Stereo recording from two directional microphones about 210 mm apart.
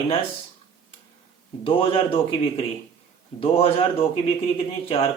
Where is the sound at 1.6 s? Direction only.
25° left (ahead or behind).